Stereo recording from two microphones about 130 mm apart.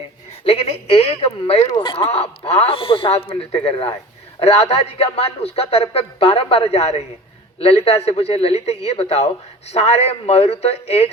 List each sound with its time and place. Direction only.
0.4 s speech: 50° left (ahead or behind)
1.7 s speech: 40° left (ahead or behind)